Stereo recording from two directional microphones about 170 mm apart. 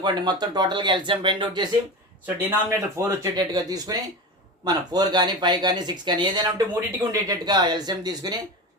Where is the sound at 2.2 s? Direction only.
15° right (ahead or behind).